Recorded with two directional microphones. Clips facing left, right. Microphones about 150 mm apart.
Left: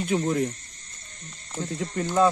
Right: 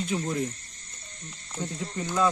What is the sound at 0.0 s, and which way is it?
Speech, 55° left (ahead or behind).